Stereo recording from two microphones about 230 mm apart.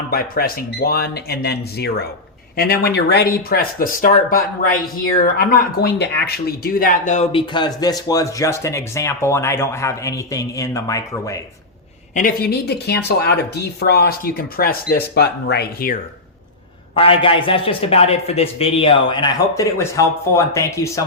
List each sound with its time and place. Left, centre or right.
0.1 s speech: left; by 11.3 s centre
12.1 s speech: left
16.9 s speech: left